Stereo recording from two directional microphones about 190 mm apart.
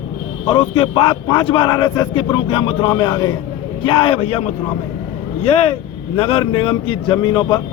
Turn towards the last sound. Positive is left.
turn(degrees=20)  # may be behind; listen again after turning